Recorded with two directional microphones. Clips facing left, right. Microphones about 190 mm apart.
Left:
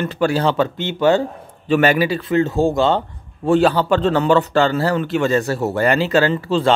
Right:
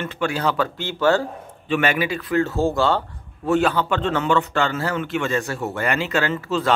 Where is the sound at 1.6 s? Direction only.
40° left (ahead or behind).